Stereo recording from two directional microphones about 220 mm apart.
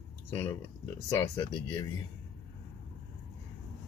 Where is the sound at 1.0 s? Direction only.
15° left (ahead or behind).